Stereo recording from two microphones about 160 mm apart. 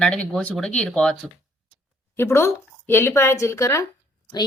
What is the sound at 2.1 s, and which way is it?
A woman's voice, 15° left (ahead or behind).